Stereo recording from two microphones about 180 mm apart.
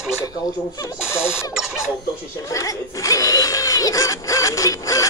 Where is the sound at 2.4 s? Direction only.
20° left (ahead or behind).